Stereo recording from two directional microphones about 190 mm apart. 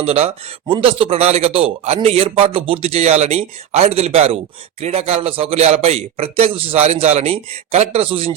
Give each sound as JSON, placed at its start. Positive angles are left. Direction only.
{"t": 0.0, "sound": "a man's voice", "side_deg": -35}